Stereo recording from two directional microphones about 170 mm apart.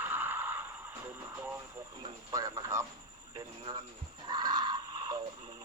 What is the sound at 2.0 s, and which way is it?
Speech, 20° right (ahead or behind).